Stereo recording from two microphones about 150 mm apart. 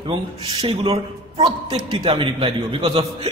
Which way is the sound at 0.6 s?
35° right (ahead or behind).